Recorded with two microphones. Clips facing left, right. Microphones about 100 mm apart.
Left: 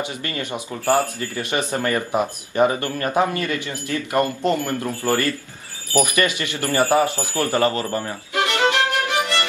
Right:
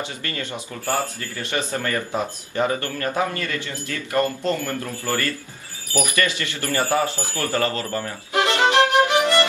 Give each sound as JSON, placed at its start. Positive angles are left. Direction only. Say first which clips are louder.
{"t": 0.3, "sound": "speech", "louder": "left 3 dB", "side_deg": 20}
{"t": 8.4, "sound": "violin", "louder": "right 2 dB", "side_deg": -20}